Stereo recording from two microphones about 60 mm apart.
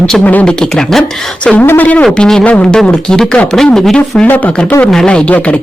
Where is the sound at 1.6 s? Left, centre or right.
Left.